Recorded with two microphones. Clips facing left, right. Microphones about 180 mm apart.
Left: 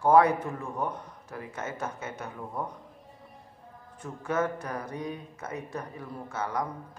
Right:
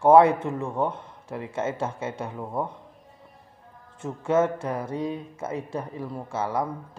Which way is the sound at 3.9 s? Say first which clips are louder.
Right 8 dB; 25° right (ahead or behind).